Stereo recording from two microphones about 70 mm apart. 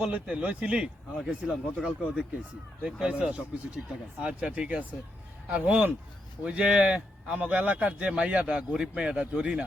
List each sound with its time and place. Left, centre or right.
0.1 s speech: centre